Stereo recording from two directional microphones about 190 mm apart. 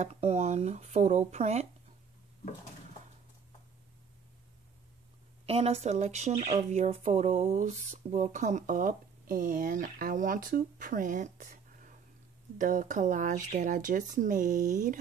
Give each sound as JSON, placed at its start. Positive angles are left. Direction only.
{"t": 0.0, "sound": "speech", "side_deg": -35}
{"t": 5.5, "sound": "speech", "side_deg": -35}